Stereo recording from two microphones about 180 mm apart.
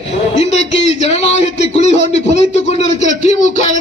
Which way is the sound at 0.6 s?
90° left.